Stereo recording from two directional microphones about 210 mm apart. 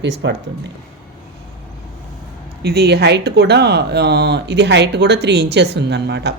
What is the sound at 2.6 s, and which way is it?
Speech, 50° right (ahead or behind).